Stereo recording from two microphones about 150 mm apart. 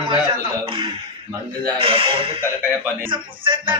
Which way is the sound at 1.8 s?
35° right (ahead or behind).